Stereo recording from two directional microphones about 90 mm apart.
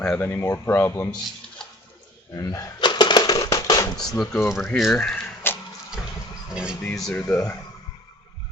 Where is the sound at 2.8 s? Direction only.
60° left (ahead or behind).